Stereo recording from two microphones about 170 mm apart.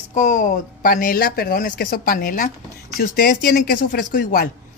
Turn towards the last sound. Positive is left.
turn(degrees=50)  # may be behind; listen again after turning